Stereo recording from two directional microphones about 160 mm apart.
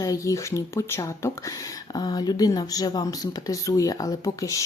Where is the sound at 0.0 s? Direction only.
20° left (ahead or behind).